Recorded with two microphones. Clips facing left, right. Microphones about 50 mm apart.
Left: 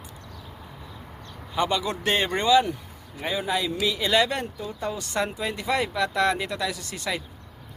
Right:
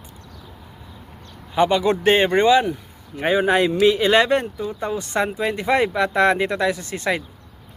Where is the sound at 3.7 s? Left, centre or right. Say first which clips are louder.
Right 8 dB; right.